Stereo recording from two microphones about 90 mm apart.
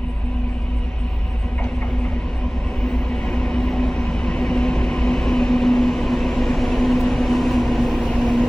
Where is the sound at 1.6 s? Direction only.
10° left (ahead or behind).